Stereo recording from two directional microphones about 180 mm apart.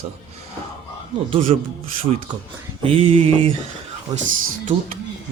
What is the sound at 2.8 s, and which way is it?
Speech, 30° right (ahead or behind).